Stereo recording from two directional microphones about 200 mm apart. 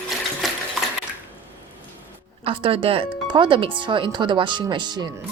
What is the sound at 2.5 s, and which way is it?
Speech, 25° right (ahead or behind).